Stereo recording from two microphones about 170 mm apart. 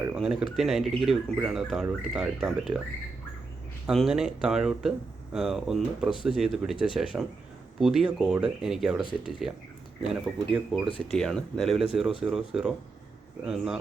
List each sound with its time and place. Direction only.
0.0 s speech: 5° right (ahead or behind)
3.8 s speech: 5° right (ahead or behind)